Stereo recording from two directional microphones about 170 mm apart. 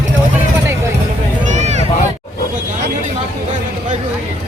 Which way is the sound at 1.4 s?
45° right (ahead or behind).